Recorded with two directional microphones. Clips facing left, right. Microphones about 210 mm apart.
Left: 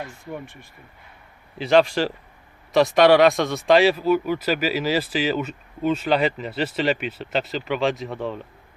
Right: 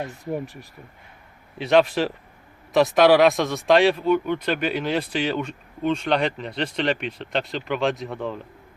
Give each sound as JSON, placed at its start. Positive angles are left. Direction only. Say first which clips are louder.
{"t": 0.1, "sound": "speech", "louder": "right 5 dB", "side_deg": -35}
{"t": 1.5, "sound": "speech", "louder": "left 1 dB", "side_deg": 0}